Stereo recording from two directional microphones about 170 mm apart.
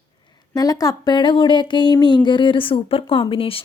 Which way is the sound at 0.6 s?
20° left (ahead or behind).